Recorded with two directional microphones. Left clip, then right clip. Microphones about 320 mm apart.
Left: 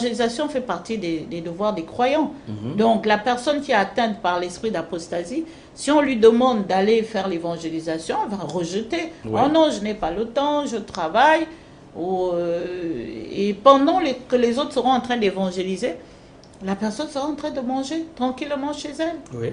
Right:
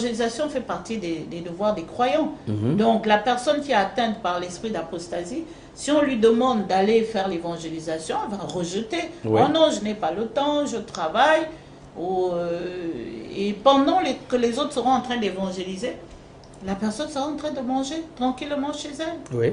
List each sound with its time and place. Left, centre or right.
0.0 s a woman's voice: left
16.6 s speech: left